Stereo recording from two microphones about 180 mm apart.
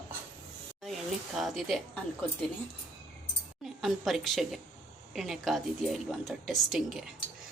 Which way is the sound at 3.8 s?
Centre (ahead or behind).